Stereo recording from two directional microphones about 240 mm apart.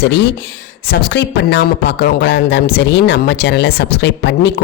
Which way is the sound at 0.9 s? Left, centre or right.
Left.